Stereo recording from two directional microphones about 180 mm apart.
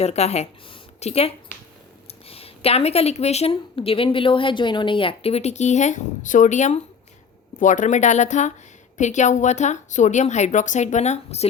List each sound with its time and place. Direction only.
0.0 s a woman's voice: 35° left (ahead or behind)